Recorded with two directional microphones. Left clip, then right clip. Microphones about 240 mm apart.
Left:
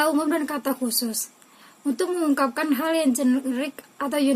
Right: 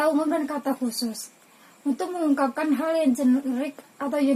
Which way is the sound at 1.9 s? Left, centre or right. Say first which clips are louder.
Left 2 dB; left.